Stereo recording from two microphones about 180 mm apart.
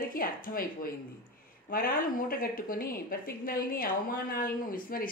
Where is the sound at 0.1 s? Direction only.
50° left (ahead or behind).